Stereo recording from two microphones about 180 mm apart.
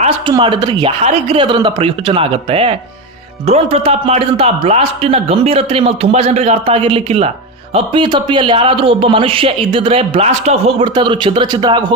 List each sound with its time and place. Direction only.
0.0 s speech: 25° right (ahead or behind)